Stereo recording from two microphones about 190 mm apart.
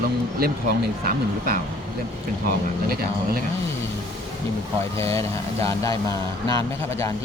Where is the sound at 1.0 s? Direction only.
50° right (ahead or behind).